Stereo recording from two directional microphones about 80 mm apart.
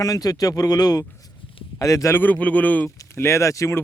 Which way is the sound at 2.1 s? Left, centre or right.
Left.